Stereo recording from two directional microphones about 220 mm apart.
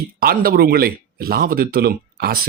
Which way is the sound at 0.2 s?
45° right (ahead or behind).